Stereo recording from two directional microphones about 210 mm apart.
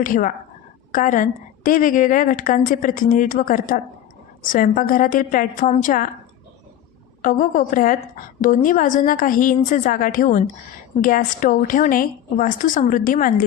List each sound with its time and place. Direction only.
0.0 s a woman's voice: 40° left (ahead or behind)
7.2 s a woman's voice: 40° left (ahead or behind)